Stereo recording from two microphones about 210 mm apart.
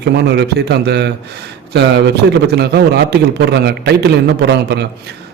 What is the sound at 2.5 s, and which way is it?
A man's voice, 50° right (ahead or behind).